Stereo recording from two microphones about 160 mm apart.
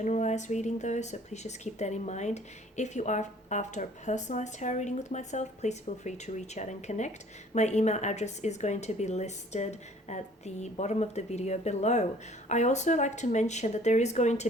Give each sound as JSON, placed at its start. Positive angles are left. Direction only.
{"t": 0.0, "sound": "speech", "side_deg": 45}